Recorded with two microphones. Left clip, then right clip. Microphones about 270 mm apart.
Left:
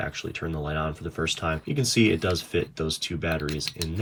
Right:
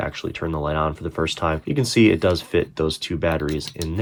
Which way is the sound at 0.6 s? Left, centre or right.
Centre.